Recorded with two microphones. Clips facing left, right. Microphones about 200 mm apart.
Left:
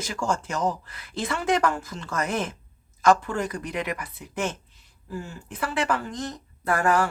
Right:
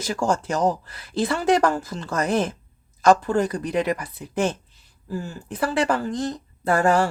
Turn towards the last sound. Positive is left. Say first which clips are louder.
# right 4 dB
turn(degrees=-30)  # may be behind; listen again after turning